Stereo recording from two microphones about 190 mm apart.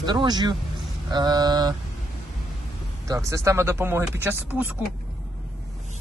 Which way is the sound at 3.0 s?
15° right (ahead or behind).